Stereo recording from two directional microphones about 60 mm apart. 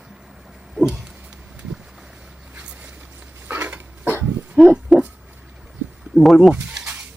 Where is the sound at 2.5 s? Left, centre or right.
Right.